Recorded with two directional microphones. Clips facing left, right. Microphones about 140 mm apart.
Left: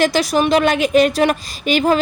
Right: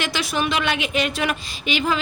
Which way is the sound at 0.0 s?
40° left (ahead or behind).